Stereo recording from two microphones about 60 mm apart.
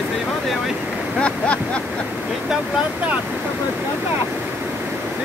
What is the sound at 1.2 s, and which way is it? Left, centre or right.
Speech, centre.